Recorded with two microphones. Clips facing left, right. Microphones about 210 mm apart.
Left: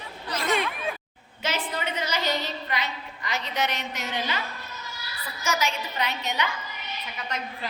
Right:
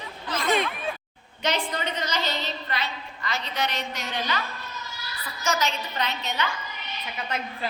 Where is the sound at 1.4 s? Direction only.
5° left (ahead or behind); by 4.4 s 20° left (ahead or behind).